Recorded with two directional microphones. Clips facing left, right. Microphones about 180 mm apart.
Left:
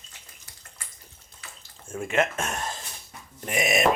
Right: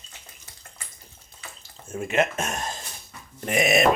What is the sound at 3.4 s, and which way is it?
Speech, 60° right (ahead or behind).